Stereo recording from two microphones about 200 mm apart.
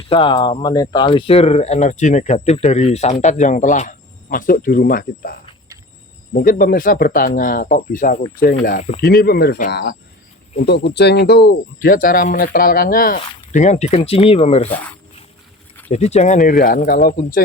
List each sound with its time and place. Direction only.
0.1 s speech: 25° left (ahead or behind)
15.9 s speech: 35° left (ahead or behind)